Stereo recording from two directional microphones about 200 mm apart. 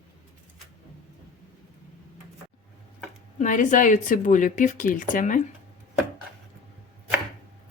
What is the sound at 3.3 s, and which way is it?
A woman's voice, 40° left (ahead or behind).